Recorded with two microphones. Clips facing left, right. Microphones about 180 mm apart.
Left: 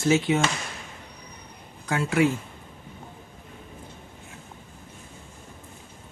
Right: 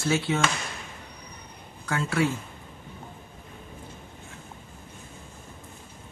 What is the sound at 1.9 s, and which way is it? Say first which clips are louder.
Speech: left 3 dB; 20° left (ahead or behind).